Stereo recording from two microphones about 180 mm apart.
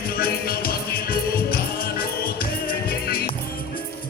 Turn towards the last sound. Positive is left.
turn(degrees=55)  # may be behind; listen again after turning